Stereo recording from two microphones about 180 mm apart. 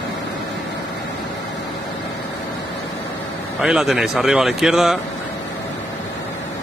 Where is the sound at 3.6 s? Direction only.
5° right (ahead or behind).